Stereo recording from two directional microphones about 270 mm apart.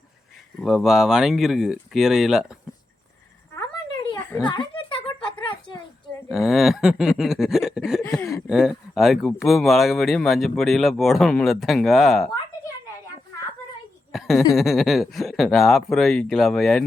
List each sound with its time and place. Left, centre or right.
0.6 s speech: centre
4.2 s a sound: centre
6.2 s speech: centre
8.0 s speech: centre
8.3 s speech: centre
14.1 s speech: centre